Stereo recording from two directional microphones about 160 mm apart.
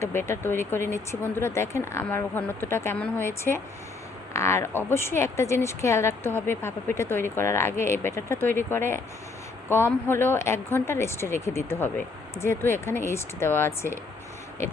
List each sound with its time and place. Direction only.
0.0 s speech: 15° left (ahead or behind)